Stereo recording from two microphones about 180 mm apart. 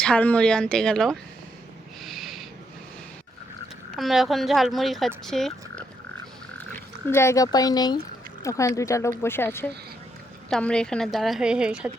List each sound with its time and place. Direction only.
0.0 s speech: 5° left (ahead or behind)
2.0 s snort: centre (ahead or behind)
3.9 s speech: centre (ahead or behind)
7.1 s speech: 15° left (ahead or behind); by 11.9 s 5° right (ahead or behind)